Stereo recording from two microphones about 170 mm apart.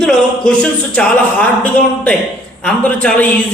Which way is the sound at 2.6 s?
5° left (ahead or behind).